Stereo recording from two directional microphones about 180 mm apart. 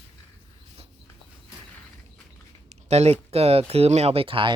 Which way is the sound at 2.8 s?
35° right (ahead or behind).